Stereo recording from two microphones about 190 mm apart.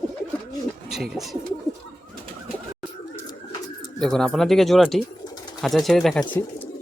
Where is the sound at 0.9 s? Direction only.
Centre (ahead or behind).